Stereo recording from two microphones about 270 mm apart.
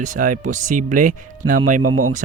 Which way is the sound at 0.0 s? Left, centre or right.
Right.